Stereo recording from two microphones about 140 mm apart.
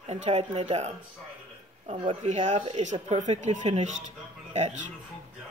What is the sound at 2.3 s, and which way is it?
Speech, 60° right (ahead or behind).